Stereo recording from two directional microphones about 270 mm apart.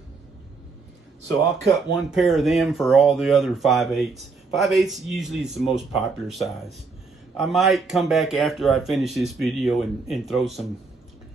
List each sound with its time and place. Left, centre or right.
1.7 s speech: centre